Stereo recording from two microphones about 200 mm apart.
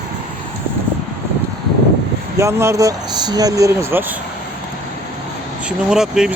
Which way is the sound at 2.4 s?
15° right (ahead or behind).